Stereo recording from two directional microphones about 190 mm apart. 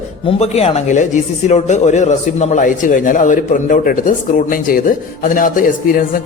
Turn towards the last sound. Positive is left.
turn(degrees=45)  # may be behind; listen again after turning